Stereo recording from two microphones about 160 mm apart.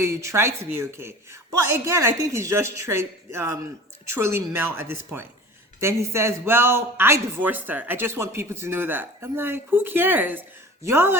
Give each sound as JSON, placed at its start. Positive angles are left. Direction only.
{"t": 0.0, "sound": "speech", "side_deg": -15}